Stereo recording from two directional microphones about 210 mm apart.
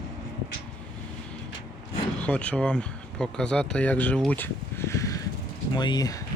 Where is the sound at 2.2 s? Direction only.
5° left (ahead or behind).